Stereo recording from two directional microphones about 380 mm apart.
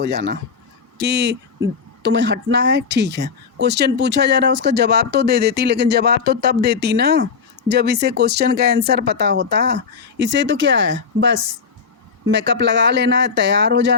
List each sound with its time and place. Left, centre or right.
0.0 s speech: right